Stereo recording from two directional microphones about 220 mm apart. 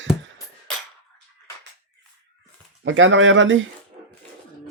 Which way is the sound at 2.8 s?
60° right (ahead or behind).